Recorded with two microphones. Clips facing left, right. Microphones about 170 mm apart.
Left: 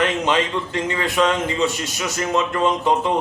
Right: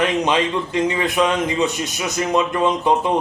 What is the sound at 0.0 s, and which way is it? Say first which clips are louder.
A man's voice: right 1 dB; 20° right (ahead or behind).